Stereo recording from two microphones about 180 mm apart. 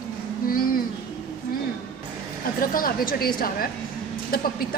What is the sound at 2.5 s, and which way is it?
A woman's voice, 55° left (ahead or behind).